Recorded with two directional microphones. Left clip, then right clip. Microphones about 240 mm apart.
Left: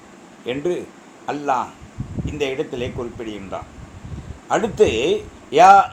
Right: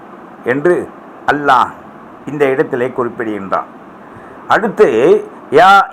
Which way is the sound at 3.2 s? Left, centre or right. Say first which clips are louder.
Right 11 dB; centre.